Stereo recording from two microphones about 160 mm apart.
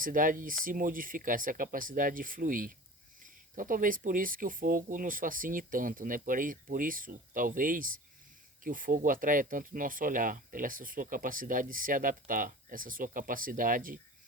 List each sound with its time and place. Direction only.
0.0 s speech: 60° right (ahead or behind)